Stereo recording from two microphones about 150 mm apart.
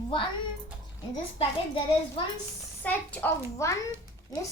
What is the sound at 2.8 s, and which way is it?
Speech, 10° left (ahead or behind).